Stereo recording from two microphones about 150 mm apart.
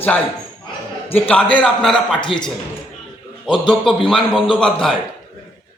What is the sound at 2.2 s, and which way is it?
Speech, 30° left (ahead or behind).